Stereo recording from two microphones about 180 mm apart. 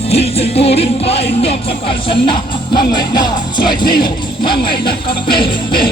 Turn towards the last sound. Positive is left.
turn(degrees=25)  # may be behind; listen again after turning